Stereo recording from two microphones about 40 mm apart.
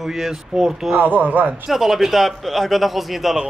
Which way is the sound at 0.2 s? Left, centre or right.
Centre.